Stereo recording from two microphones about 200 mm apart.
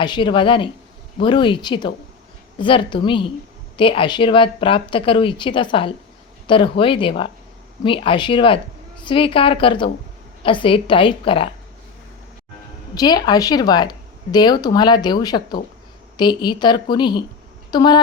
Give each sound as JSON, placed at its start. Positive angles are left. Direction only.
{"t": 0.0, "sound": "speech", "side_deg": 25}
{"t": 12.9, "sound": "a woman's voice", "side_deg": 20}